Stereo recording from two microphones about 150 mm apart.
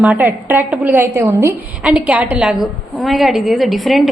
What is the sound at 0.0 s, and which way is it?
A woman's voice, 10° right (ahead or behind).